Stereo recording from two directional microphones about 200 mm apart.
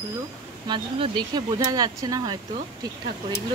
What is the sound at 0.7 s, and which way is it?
Speech, 25° right (ahead or behind).